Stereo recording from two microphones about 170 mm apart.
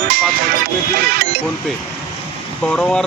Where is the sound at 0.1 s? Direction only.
60° right (ahead or behind).